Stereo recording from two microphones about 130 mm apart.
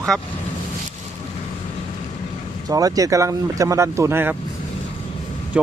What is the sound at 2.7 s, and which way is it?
Speech, 25° right (ahead or behind).